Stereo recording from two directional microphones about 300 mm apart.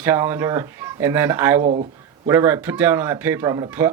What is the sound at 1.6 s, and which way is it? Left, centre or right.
Speech, right.